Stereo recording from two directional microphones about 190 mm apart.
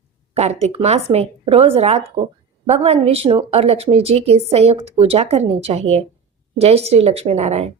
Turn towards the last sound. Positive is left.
turn(degrees=-35)  # may be behind; listen again after turning